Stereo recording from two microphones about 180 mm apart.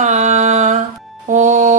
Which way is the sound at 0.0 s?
40° right (ahead or behind).